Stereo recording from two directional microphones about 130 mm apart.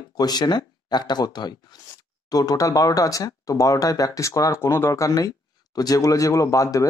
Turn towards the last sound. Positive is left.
turn(degrees=25)  # may be behind; listen again after turning